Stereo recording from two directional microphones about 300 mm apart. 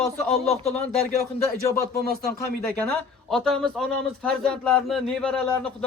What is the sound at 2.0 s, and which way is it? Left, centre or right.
Speech, right.